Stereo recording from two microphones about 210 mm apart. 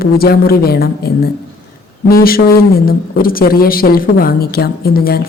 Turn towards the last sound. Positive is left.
turn(degrees=45)  # may be behind; listen again after turning